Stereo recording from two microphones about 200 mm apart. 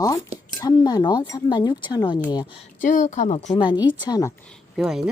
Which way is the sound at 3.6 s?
20° left (ahead or behind).